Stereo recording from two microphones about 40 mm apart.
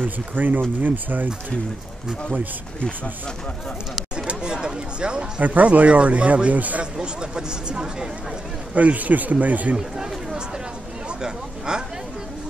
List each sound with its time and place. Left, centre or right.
0.0 s speech: right
4.4 s a sound: centre
5.4 s a man's voice: right
6.8 s speech: right
8.7 s a man's voice: right
9.8 s chatter: centre
11.1 s a sound: centre